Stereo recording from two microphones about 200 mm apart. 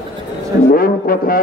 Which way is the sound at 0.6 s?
45° left (ahead or behind).